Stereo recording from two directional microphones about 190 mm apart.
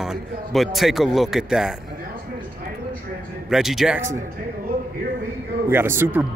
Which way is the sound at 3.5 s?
Centre (ahead or behind).